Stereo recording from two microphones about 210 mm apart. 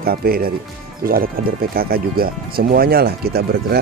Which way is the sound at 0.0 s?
45° right (ahead or behind).